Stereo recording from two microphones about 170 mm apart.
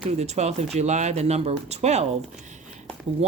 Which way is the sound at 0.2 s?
40° right (ahead or behind).